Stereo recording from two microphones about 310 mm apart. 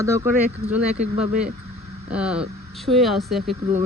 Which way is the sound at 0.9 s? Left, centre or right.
Right.